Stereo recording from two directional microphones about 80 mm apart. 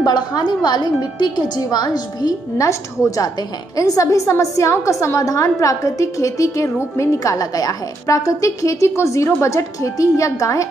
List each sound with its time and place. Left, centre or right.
0.0 s a woman's voice: left
2.5 s a woman's voice: left